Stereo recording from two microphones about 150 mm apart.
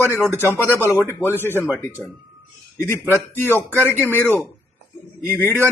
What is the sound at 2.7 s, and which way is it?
A man's voice, 15° left (ahead or behind).